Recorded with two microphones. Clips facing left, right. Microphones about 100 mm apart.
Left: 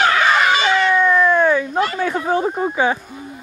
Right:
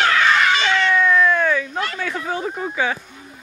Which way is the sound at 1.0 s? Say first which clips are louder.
Left 2 dB; 30° left (ahead or behind).